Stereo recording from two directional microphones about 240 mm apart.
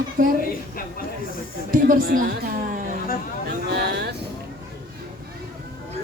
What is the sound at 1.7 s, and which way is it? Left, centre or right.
Speech, right.